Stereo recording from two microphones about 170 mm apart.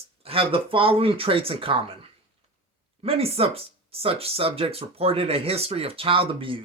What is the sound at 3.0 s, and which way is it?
Speech, 35° right (ahead or behind).